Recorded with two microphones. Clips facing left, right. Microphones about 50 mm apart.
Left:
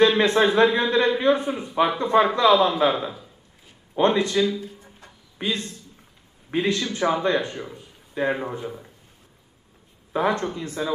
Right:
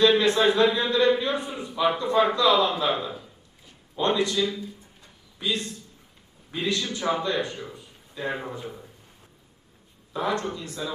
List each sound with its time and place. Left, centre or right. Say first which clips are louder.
0.0 s a man's voice: left 2 dB; left
3.9 s a man's voice: left 4 dB; left
4.9 s a sound: left 7 dB; left
6.5 s a man's voice: left 4 dB; left
10.1 s a man's voice: left 4 dB; left